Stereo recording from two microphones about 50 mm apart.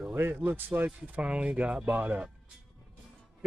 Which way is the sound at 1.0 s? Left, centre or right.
Right.